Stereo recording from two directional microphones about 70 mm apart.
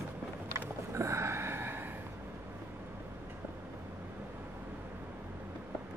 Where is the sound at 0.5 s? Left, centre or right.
Right.